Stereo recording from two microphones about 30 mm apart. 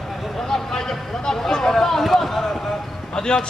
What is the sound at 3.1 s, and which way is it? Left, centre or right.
Clip-clop, left.